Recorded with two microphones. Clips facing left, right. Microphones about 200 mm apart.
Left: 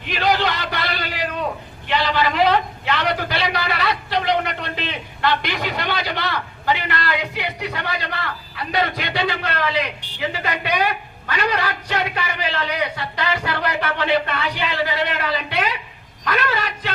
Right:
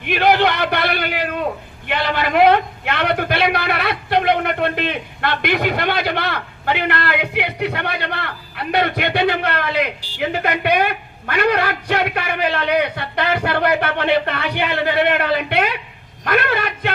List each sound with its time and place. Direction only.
0.0 s a man's voice: 55° right (ahead or behind)